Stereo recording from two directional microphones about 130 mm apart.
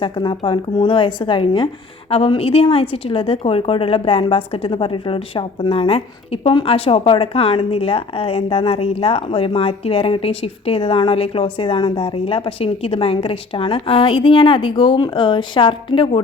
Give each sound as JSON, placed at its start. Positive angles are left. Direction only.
{"t": 0.0, "sound": "a woman's voice", "side_deg": 40}